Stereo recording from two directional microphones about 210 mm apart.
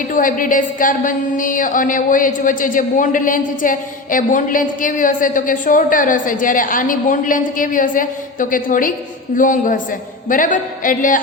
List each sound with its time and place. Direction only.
0.1 s a woman's voice: 40° left (ahead or behind)